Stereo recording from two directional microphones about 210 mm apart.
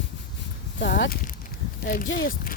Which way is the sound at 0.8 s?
55° left (ahead or behind).